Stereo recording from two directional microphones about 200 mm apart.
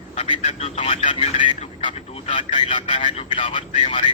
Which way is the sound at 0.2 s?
30° left (ahead or behind).